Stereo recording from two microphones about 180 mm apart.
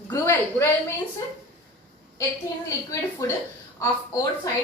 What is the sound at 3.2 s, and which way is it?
A woman's voice, 20° left (ahead or behind).